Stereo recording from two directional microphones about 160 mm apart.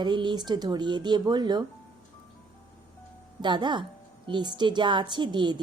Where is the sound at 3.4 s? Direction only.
30° right (ahead or behind).